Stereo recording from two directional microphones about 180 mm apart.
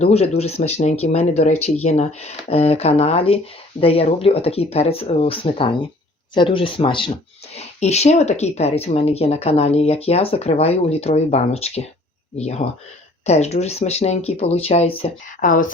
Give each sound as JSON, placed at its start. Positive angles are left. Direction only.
{"t": 0.0, "sound": "speech", "side_deg": 35}
{"t": 15.4, "sound": "speech", "side_deg": 45}